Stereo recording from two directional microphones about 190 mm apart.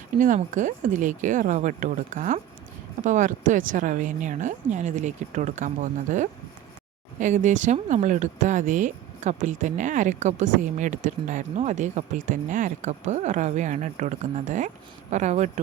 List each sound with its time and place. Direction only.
0.2 s speech: 40° right (ahead or behind)